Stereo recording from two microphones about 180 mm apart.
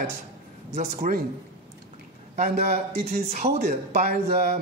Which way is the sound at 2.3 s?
40° right (ahead or behind).